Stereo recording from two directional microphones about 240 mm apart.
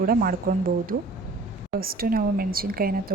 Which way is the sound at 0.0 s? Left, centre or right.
Right.